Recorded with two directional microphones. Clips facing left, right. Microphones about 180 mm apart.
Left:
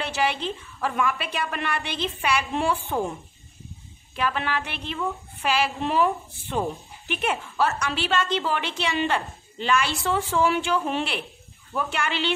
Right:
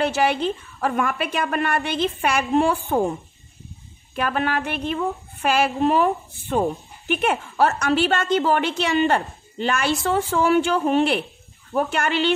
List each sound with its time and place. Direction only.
0.0 s a woman's voice: 45° right (ahead or behind)
4.1 s a woman's voice: 45° right (ahead or behind)